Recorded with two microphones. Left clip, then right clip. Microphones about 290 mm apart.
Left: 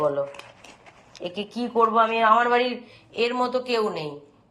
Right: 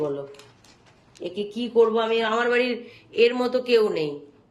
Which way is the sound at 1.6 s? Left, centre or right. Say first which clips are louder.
Even; centre.